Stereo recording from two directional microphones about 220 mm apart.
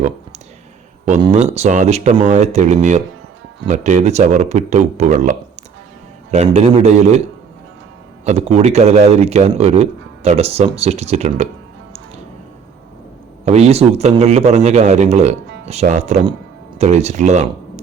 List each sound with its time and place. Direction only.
1.0 s a man's voice: 30° right (ahead or behind)
8.2 s a man's voice: 30° right (ahead or behind)
13.4 s a man's voice: 30° right (ahead or behind)